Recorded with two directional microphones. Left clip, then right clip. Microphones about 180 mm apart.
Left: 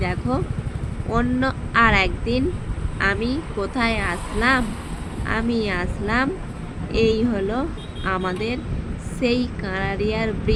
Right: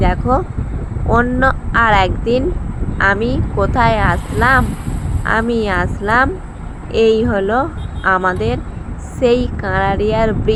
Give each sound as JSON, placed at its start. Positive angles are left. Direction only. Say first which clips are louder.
{"t": 0.0, "sound": "speech", "louder": "right 9 dB", "side_deg": -15}